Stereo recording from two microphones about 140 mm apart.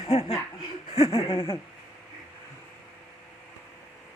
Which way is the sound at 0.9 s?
45° left (ahead or behind).